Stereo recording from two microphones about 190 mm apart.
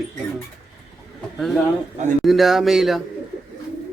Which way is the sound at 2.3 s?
Centre (ahead or behind).